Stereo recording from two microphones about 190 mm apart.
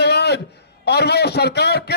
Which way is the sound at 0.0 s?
60° left (ahead or behind).